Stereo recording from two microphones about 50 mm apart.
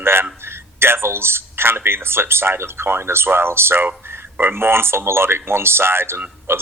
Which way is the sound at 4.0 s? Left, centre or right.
Right.